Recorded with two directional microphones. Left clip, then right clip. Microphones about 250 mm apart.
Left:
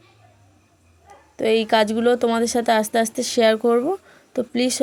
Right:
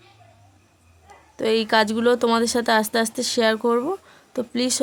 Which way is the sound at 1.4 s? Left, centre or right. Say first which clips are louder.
Left 2 dB; centre.